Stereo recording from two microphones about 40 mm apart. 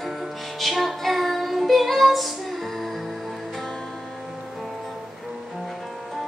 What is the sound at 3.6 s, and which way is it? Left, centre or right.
Music, centre.